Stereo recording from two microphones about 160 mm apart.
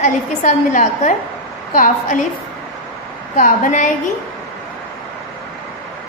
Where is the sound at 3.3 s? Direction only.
55° left (ahead or behind).